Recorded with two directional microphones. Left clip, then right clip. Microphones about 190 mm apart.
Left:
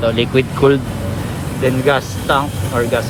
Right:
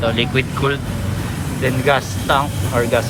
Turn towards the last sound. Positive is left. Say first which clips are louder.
# even
turn(degrees=10)  # may be behind; listen again after turning